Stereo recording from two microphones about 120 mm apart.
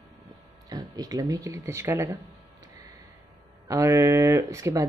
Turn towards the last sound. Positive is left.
turn(degrees=-25)  # may be behind; listen again after turning